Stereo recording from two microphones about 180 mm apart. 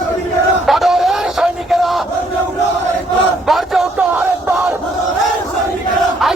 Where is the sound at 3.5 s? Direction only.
Centre (ahead or behind).